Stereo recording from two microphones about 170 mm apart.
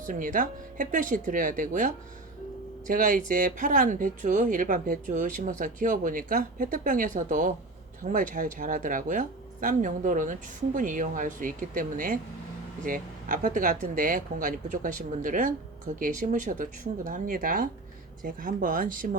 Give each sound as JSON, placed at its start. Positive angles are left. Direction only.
{"t": 0.0, "sound": "speech", "side_deg": -50}